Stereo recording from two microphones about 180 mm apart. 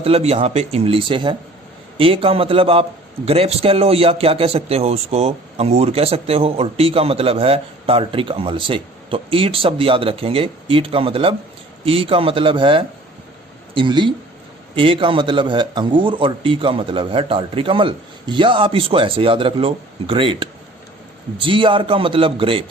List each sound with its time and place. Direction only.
0.0 s speech: 35° right (ahead or behind)